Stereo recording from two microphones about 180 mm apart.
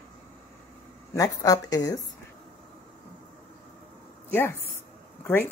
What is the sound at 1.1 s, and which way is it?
Speech, 20° left (ahead or behind).